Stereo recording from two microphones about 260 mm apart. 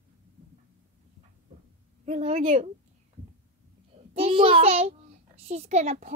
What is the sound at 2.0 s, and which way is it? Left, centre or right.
Speech, right.